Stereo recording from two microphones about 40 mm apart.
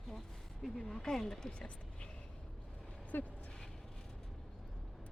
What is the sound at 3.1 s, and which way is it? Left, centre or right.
Speech, left.